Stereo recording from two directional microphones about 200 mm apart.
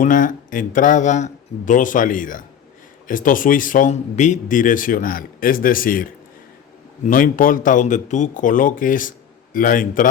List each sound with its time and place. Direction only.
0.0 s speech: 40° left (ahead or behind)